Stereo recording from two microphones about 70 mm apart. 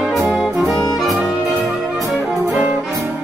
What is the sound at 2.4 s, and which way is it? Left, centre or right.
Music, right.